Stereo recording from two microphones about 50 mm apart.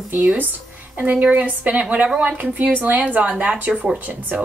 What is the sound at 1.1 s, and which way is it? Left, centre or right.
A woman's voice, right.